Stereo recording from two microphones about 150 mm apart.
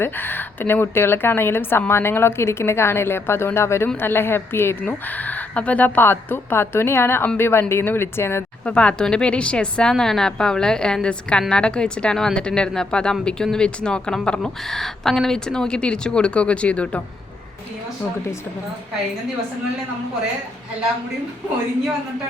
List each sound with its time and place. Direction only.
0.0 s a woman's voice: 15° left (ahead or behind)